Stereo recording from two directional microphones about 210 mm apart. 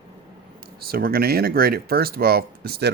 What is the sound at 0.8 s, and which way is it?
Speech, 45° right (ahead or behind).